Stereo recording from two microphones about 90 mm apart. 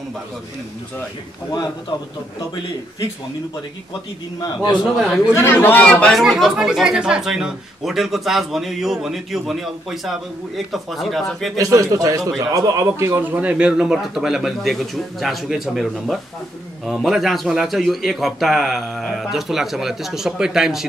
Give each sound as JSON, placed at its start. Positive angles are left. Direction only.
{"t": 4.9, "sound": "speech", "side_deg": 0}
{"t": 5.3, "sound": "speech", "side_deg": 25}
{"t": 5.9, "sound": "speech", "side_deg": 10}
{"t": 6.1, "sound": "speech", "side_deg": 0}
{"t": 11.5, "sound": "a man's voice", "side_deg": -40}
{"t": 13.4, "sound": "speech", "side_deg": -15}